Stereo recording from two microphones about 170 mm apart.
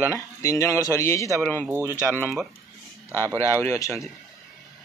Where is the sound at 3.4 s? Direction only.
15° left (ahead or behind).